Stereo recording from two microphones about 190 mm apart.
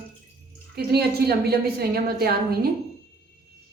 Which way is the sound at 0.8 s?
55° right (ahead or behind).